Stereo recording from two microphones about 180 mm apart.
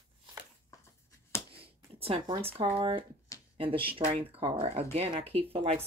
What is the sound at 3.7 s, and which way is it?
Speech, 30° right (ahead or behind).